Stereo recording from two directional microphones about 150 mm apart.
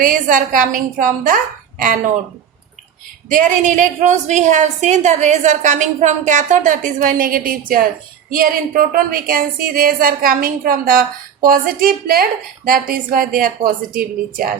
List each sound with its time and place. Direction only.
0.0 s a woman's voice: 65° right (ahead or behind)
3.2 s a woman's voice: 60° right (ahead or behind)